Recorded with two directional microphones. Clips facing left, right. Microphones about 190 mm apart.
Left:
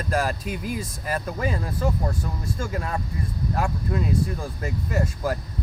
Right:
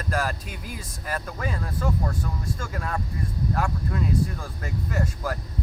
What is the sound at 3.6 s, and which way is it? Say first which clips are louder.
Vehicle: left 4 dB; 10° left (ahead or behind).